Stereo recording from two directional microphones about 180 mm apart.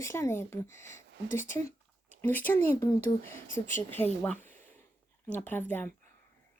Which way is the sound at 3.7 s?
10° left (ahead or behind).